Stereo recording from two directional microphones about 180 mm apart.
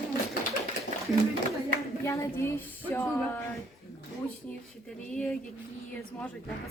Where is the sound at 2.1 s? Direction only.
15° left (ahead or behind).